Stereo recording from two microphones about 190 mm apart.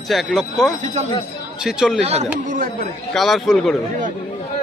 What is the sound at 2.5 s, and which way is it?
Speech, 45° right (ahead or behind).